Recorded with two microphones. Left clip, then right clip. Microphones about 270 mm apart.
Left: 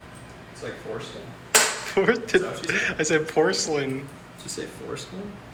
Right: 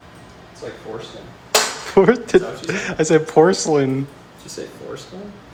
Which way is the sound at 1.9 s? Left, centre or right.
Right.